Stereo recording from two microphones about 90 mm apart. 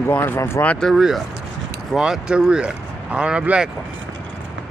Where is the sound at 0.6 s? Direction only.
15° left (ahead or behind).